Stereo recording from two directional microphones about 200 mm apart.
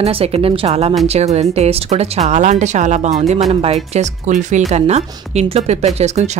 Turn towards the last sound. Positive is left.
turn(degrees=-35)  # may be behind; listen again after turning